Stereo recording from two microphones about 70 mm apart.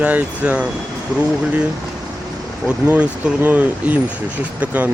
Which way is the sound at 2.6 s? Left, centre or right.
Centre.